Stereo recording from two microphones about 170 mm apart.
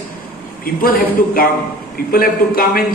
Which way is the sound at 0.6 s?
55° left (ahead or behind).